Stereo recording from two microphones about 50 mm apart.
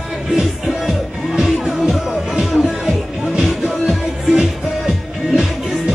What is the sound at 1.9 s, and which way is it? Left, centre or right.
Music, centre.